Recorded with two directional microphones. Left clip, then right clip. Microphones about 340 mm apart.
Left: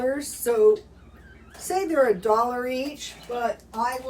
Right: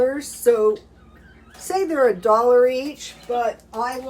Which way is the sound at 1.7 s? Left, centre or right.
Centre.